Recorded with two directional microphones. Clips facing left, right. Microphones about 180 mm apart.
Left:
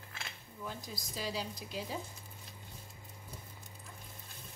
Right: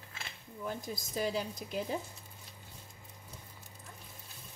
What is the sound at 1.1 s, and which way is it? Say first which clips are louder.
Frying: right 5 dB; 50° right (ahead or behind).